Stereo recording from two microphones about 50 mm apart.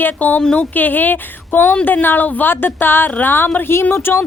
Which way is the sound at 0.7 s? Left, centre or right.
Left.